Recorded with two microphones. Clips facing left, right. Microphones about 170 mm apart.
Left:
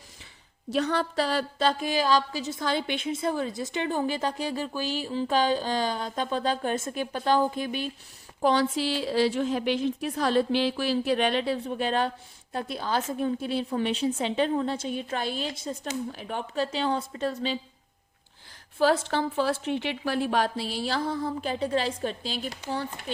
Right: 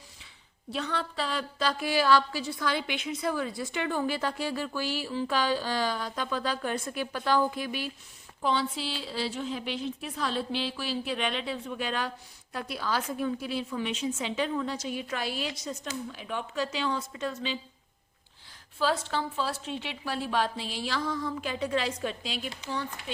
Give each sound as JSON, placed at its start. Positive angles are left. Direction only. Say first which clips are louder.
{"t": 0.7, "sound": "a woman's voice", "louder": "left 7 dB", "side_deg": 40}
{"t": 8.4, "sound": "a woman's voice", "louder": "left 6 dB", "side_deg": 45}
{"t": 16.0, "sound": "a woman's voice", "louder": "left 2 dB", "side_deg": 45}
{"t": 16.6, "sound": "a woman's voice", "louder": "left 4 dB", "side_deg": 30}
{"t": 18.8, "sound": "a woman's voice", "louder": "left 5 dB", "side_deg": 55}
{"t": 20.8, "sound": "a woman's voice", "louder": "left 2 dB", "side_deg": 30}